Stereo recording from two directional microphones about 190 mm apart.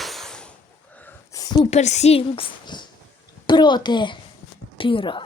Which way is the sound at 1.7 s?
35° left (ahead or behind).